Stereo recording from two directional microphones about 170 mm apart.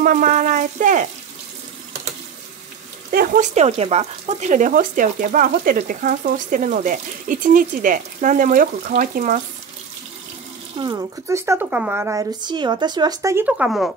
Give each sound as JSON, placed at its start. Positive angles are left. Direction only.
{"t": 0.0, "sound": "speech", "side_deg": -50}
{"t": 3.1, "sound": "speech", "side_deg": -50}
{"t": 10.8, "sound": "speech", "side_deg": -25}